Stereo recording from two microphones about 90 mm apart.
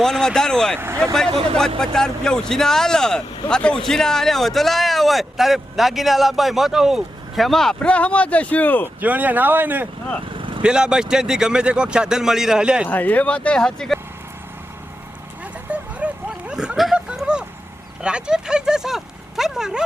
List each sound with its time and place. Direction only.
0.0 s speech: 5° left (ahead or behind)
0.8 s speech: 30° right (ahead or behind)
1.5 s speech: 5° left (ahead or behind)
9.0 s speech: 20° right (ahead or behind)
10.6 s speech: 10° right (ahead or behind)
12.9 s speech: 20° left (ahead or behind)
15.7 s a sound: 15° right (ahead or behind)
18.0 s speech: 10° right (ahead or behind)